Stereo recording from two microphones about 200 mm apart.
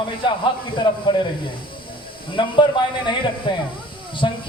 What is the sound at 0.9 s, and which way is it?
Speech, 20° left (ahead or behind).